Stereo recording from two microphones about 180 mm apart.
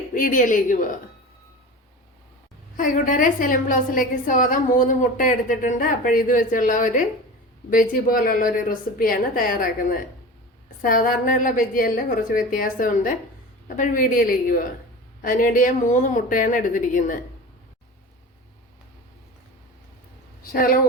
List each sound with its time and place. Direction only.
0.1 s a woman's voice: 50° left (ahead or behind)
2.7 s a woman's voice: 50° left (ahead or behind)
20.4 s a woman's voice: 55° left (ahead or behind)